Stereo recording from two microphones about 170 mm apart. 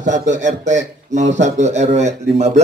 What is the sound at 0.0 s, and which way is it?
A man's voice, 45° right (ahead or behind).